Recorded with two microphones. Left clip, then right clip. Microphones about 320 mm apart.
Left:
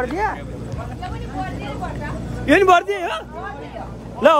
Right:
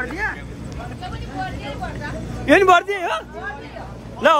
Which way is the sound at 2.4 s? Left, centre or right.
Centre.